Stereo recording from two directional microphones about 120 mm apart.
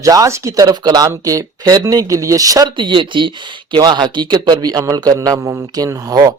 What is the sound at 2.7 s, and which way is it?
Speech, 45° right (ahead or behind).